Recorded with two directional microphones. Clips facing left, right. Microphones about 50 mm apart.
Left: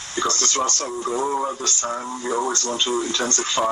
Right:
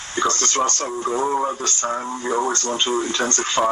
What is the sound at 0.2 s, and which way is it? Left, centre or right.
Speech, right.